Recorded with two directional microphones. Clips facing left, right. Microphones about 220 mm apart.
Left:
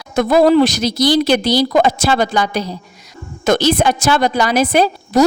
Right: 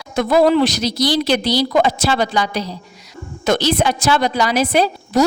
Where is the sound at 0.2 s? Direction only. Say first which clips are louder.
Left 3 dB; 45° left (ahead or behind).